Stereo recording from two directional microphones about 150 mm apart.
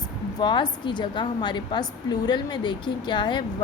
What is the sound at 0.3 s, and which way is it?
A woman's voice, 30° left (ahead or behind).